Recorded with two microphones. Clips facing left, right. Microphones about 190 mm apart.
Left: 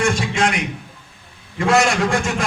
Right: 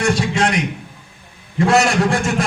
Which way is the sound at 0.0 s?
35° right (ahead or behind).